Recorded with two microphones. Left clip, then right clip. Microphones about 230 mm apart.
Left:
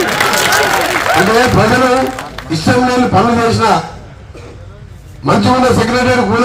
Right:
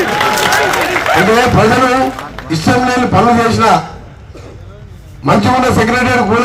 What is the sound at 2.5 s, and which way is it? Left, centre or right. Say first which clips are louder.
A man's voice: even; right.